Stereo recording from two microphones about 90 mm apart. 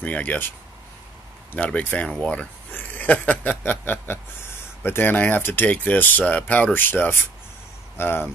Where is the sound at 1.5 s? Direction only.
15° left (ahead or behind).